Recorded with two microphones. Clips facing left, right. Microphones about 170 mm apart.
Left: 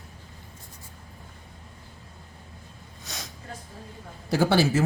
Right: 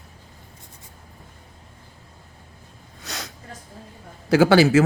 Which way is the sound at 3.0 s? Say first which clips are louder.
Right 5 dB; 70° right (ahead or behind).